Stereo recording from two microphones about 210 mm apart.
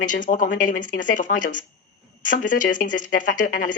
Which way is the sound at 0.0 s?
40° left (ahead or behind).